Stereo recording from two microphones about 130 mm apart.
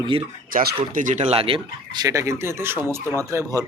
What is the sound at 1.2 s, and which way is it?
Speech, 50° right (ahead or behind).